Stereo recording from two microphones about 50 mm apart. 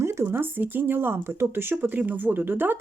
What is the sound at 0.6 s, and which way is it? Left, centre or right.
Speech, right.